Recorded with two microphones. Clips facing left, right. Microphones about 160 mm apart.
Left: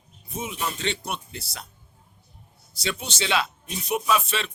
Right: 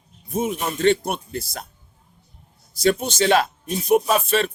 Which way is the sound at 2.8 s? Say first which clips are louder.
Right 11 dB; 50° right (ahead or behind).